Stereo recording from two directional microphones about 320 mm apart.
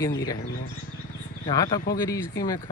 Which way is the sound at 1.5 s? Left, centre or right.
Centre.